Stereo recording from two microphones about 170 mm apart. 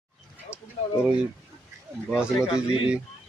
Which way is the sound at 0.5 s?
10° right (ahead or behind).